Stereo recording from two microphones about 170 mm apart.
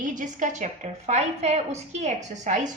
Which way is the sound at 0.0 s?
50° right (ahead or behind).